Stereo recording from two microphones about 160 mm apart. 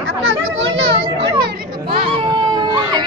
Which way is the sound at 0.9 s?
35° right (ahead or behind).